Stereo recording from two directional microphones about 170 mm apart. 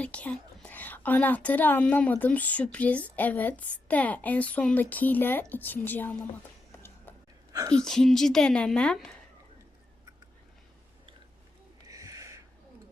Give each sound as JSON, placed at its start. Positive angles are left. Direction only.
{"t": 0.0, "sound": "speech", "side_deg": 5}
{"t": 7.5, "sound": "speech", "side_deg": -20}
{"t": 7.8, "sound": "a woman's voice", "side_deg": 0}
{"t": 11.9, "sound": "a sound", "side_deg": -20}